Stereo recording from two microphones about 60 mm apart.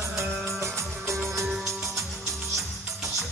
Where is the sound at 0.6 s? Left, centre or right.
Right.